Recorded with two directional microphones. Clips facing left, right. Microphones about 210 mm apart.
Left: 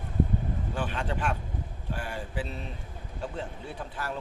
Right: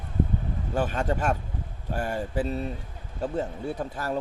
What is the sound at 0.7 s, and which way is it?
Speech, 40° right (ahead or behind).